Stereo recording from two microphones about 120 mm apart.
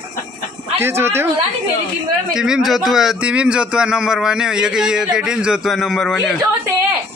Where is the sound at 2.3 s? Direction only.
5° right (ahead or behind).